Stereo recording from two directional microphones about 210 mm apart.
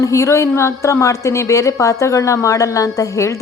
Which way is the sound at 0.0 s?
15° left (ahead or behind).